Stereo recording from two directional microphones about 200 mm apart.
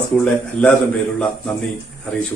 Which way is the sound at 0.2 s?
5° left (ahead or behind).